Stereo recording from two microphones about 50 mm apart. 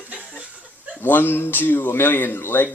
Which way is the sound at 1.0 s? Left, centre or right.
Left.